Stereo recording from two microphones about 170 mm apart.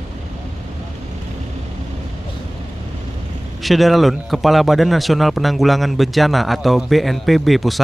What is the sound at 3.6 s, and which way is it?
Speech, centre (ahead or behind).